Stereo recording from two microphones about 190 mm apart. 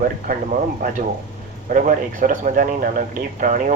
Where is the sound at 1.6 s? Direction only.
40° right (ahead or behind).